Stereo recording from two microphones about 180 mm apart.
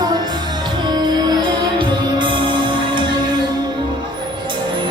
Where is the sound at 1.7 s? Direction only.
25° right (ahead or behind).